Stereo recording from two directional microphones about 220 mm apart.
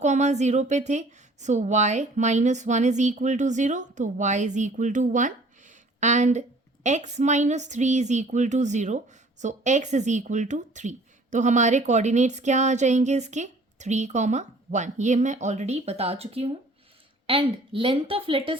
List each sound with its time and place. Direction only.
0.0 s a woman's voice: 30° right (ahead or behind)